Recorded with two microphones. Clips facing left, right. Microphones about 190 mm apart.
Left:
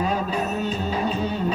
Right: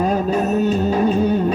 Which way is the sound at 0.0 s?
45° right (ahead or behind).